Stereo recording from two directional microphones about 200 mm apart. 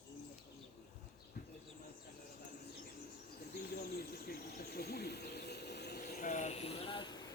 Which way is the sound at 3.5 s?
50° left (ahead or behind).